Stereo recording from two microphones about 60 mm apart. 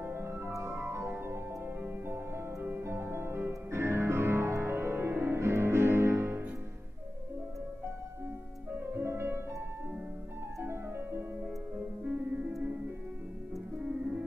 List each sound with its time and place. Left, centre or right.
0.0 s music: right
2.6 s music: right
9.0 s music: right
10.6 s music: right
12.0 s music: right